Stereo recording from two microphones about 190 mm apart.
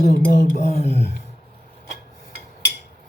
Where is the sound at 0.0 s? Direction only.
55° left (ahead or behind).